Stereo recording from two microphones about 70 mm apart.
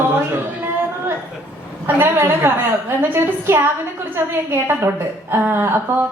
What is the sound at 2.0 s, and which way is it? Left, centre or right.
A woman's voice, right.